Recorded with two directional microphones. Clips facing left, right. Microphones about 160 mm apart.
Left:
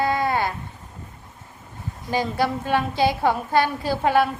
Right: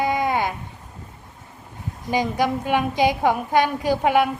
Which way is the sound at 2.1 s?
15° right (ahead or behind).